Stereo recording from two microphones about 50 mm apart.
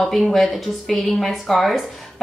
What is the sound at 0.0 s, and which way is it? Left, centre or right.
Speech, centre.